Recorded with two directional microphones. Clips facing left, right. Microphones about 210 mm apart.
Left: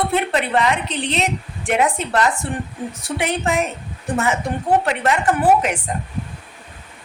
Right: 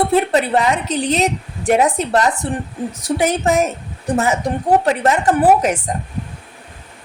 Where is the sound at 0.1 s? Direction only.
40° right (ahead or behind).